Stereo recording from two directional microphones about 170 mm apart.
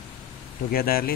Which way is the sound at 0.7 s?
60° left (ahead or behind).